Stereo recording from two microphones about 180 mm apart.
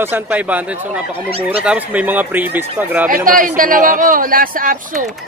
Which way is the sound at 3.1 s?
50° right (ahead or behind).